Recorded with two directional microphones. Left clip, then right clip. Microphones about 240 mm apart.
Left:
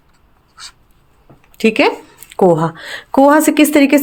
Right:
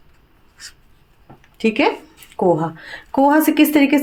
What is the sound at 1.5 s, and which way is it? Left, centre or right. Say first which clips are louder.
A woman's voice: left 5 dB; left.